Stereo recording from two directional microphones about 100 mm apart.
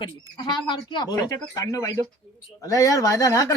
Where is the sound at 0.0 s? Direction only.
50° left (ahead or behind).